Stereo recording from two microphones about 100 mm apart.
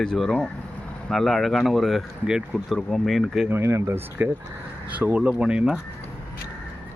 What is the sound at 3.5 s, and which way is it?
Speech, 25° right (ahead or behind).